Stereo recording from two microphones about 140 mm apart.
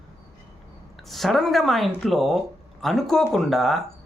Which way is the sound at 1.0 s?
Centre (ahead or behind).